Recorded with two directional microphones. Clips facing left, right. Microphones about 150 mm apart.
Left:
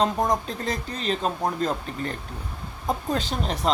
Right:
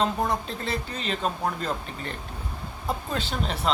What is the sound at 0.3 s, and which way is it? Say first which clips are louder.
Speech: left 3 dB; 40° left (ahead or behind).